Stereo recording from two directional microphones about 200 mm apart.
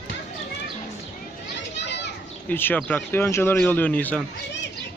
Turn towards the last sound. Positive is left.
turn(degrees=5)  # may be behind; listen again after turning